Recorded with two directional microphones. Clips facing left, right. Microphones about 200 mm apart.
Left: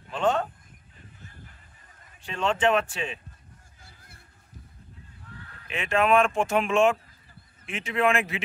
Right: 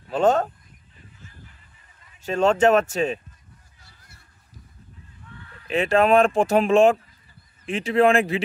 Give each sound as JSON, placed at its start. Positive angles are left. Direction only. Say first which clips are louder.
{"t": 0.1, "sound": "a sound", "louder": "right 6 dB", "side_deg": -40}
{"t": 2.2, "sound": "speech", "louder": "right 7 dB", "side_deg": -40}
{"t": 5.7, "sound": "speech", "louder": "right 5 dB", "side_deg": -35}